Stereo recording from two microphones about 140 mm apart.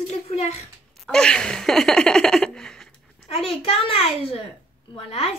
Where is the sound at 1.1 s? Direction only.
5° left (ahead or behind).